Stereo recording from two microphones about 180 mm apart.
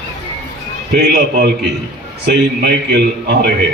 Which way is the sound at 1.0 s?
60° right (ahead or behind).